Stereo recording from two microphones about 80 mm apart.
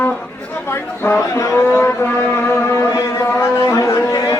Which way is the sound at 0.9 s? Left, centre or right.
Left.